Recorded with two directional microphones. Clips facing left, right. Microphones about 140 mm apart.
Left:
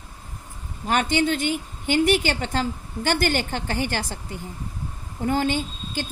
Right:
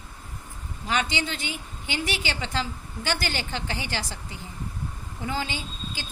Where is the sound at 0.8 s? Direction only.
50° left (ahead or behind).